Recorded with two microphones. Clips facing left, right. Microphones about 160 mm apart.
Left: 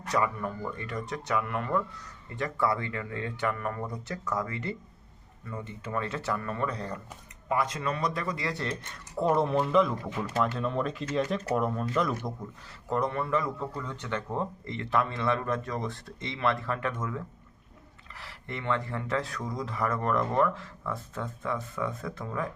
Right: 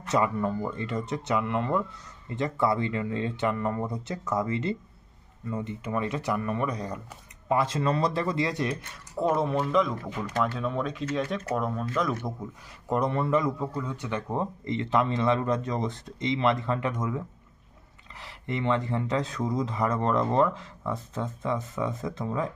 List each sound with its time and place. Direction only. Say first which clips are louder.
0.1 s speech: right 4 dB; 25° right (ahead or behind)
7.4 s speech: right 4 dB; 25° right (ahead or behind)
9.1 s speech: even; centre (ahead or behind)
12.9 s speech: right 3 dB; 20° right (ahead or behind)